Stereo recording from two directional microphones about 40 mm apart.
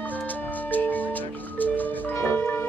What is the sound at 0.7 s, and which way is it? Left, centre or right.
Music, left.